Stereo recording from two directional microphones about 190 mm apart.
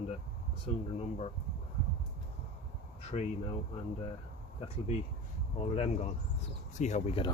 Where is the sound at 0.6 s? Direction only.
30° left (ahead or behind).